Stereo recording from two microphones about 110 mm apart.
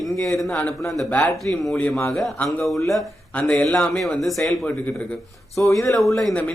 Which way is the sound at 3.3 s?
10° left (ahead or behind).